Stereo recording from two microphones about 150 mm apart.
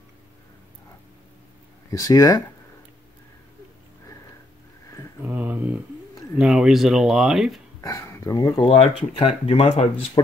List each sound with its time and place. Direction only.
1.9 s speech: 20° left (ahead or behind)
5.2 s a sound: 10° right (ahead or behind)
6.3 s speech: 5° right (ahead or behind)
7.8 s a sound: 20° left (ahead or behind)
8.6 s speech: 40° left (ahead or behind)
10.2 s speech: 30° left (ahead or behind)